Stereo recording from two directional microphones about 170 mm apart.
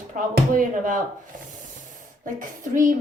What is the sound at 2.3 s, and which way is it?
Speech, 50° right (ahead or behind).